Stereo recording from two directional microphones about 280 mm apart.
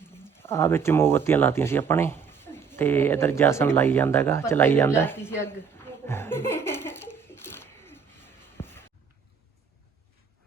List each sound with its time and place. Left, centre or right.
0.3 s speech: centre
6.1 s laughter: centre
8.5 s a sound: centre